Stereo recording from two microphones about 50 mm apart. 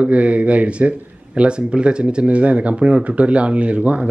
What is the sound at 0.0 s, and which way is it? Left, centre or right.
Speech, right.